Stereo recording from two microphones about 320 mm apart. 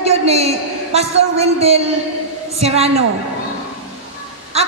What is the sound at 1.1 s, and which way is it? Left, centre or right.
Speech, right.